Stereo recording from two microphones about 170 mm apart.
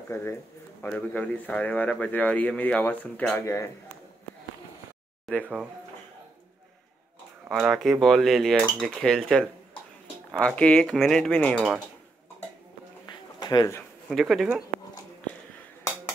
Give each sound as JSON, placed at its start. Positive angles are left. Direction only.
{"t": 0.1, "sound": "a man's voice", "side_deg": 15}
{"t": 5.3, "sound": "speech", "side_deg": 0}
{"t": 7.4, "sound": "speech", "side_deg": 0}
{"t": 13.0, "sound": "a sound", "side_deg": 25}
{"t": 14.1, "sound": "speech", "side_deg": 0}